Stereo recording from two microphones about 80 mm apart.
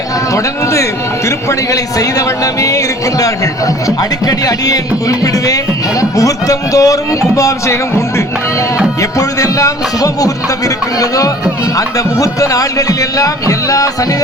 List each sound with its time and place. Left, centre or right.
0.3 s a man's voice: left